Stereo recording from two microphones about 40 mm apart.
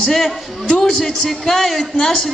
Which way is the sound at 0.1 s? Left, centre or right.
Centre.